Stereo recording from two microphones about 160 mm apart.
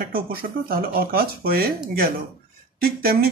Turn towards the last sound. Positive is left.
turn(degrees=-70)  # may be behind; listen again after turning